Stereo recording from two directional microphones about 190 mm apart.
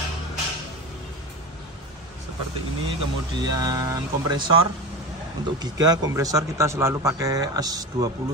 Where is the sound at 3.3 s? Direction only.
20° right (ahead or behind).